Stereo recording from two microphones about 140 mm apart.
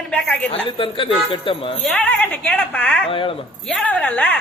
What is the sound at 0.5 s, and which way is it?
A woman's voice, 40° left (ahead or behind).